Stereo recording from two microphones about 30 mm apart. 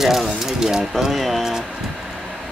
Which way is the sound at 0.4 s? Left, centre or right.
Centre.